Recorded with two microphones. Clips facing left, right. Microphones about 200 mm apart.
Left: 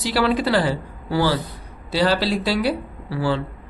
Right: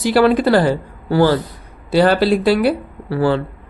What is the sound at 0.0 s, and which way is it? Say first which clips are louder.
Speech: right 7 dB; 50° right (ahead or behind).